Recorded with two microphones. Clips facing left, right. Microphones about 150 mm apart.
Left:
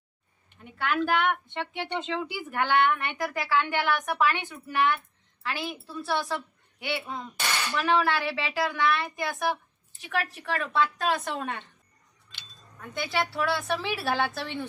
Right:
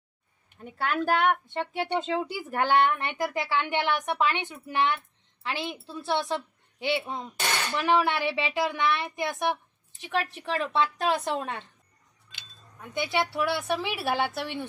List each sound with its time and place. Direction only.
0.6 s speech: 40° right (ahead or behind)
2.3 s a woman's voice: 30° right (ahead or behind)
12.7 s a woman's voice: 15° right (ahead or behind)